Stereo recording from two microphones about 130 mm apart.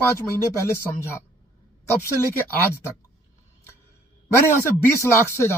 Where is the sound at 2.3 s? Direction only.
20° left (ahead or behind).